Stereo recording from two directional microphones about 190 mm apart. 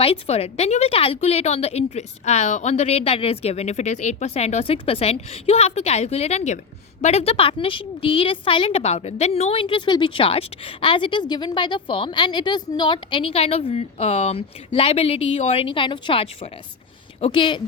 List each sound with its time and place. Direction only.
0.0 s a woman's voice: 30° left (ahead or behind)